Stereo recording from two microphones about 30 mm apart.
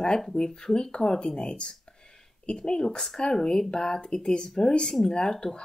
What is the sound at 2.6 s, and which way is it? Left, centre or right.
Speech, left.